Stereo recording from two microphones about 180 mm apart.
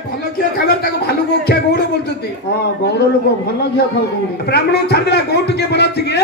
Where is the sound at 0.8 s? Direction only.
60° left (ahead or behind).